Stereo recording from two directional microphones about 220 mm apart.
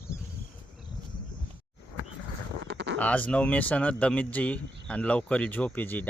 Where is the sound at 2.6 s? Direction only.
50° right (ahead or behind).